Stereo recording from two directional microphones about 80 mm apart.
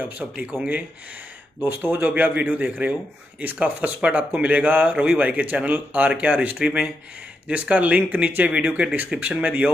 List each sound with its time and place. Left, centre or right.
0.2 s speech: centre